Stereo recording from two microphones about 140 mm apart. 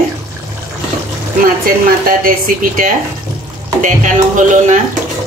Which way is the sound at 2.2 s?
80° right.